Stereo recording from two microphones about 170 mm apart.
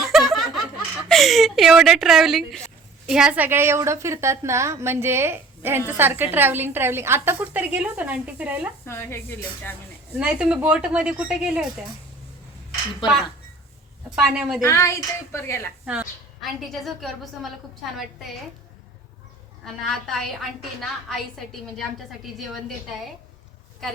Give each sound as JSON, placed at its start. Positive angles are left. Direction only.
{"t": 0.1, "sound": "snicker", "side_deg": 0}
{"t": 1.0, "sound": "a woman's voice", "side_deg": 0}
{"t": 8.9, "sound": "a woman's voice", "side_deg": 15}
{"t": 10.2, "sound": "a woman's voice", "side_deg": -5}
{"t": 13.0, "sound": "a woman's voice", "side_deg": 25}
{"t": 14.2, "sound": "a woman's voice", "side_deg": -5}
{"t": 14.6, "sound": "a woman's voice", "side_deg": 15}
{"t": 15.9, "sound": "a woman's voice", "side_deg": -5}
{"t": 19.6, "sound": "a woman's voice", "side_deg": 0}